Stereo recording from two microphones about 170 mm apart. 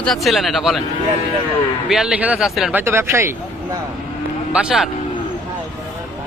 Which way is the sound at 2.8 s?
15° right (ahead or behind).